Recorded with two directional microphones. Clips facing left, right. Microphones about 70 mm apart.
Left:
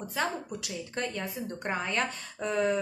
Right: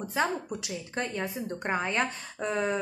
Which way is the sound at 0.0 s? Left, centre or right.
Centre.